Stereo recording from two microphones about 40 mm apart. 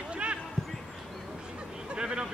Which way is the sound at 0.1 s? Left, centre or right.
Right.